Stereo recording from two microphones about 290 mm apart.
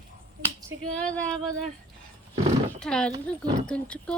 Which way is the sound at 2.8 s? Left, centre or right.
Centre.